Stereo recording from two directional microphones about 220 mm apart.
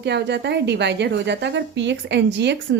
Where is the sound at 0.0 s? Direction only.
50° right (ahead or behind).